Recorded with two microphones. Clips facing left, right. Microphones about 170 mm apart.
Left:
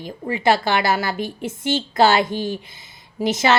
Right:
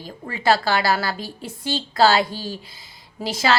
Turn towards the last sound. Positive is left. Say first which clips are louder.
# left 3 dB
turn(degrees=20)  # may be behind; listen again after turning